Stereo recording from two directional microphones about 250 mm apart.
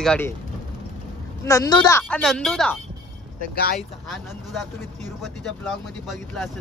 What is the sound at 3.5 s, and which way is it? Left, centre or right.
Speech, left.